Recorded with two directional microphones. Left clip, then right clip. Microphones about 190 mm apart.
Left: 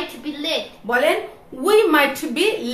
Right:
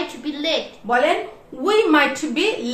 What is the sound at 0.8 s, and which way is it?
A woman's voice, 25° left (ahead or behind).